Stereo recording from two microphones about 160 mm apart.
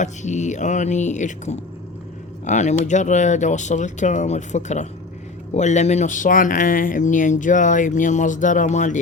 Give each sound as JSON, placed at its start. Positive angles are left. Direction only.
{"t": 0.0, "sound": "speech", "side_deg": 50}